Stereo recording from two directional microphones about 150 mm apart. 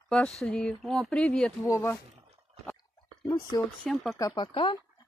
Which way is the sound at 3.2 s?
25° left (ahead or behind).